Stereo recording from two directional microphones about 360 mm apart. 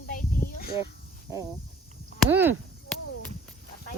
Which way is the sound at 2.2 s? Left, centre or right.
Centre.